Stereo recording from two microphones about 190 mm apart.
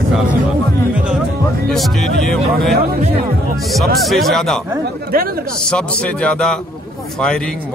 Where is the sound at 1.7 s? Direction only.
Centre (ahead or behind).